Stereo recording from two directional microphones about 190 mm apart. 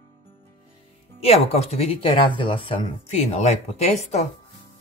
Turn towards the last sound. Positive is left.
turn(degrees=35)  # may be behind; listen again after turning